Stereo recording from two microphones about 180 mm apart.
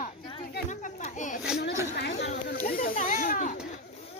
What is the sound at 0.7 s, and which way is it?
Speech, 45° left (ahead or behind).